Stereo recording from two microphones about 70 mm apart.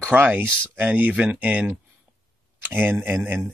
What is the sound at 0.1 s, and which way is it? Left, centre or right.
Speech, right.